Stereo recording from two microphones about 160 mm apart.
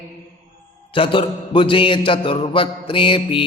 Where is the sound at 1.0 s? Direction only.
30° left (ahead or behind).